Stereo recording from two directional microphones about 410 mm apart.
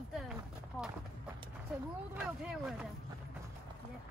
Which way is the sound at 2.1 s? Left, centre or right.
Centre.